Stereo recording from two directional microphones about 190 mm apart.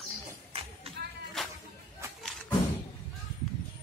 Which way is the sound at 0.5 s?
30° right (ahead or behind).